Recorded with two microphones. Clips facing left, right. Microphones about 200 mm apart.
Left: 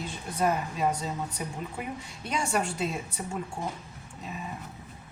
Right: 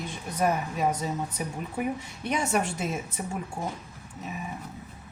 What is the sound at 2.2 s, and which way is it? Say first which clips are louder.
A woman's voice: right 2 dB; 20° right (ahead or behind).